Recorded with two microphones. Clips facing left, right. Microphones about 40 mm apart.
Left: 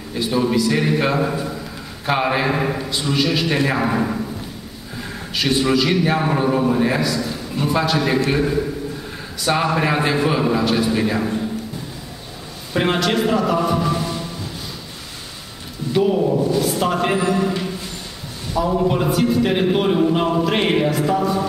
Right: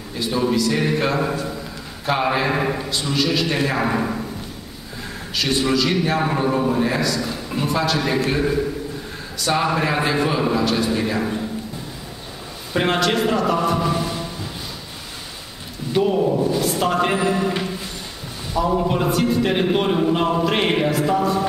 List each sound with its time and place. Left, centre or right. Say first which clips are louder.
0.1 s a man's voice: left 2 dB; centre
5.3 s a man's voice: left 2 dB; centre
7.2 s a man's voice: left 1 dB; centre
12.7 s a man's voice: even; centre
15.9 s a man's voice: left 1 dB; centre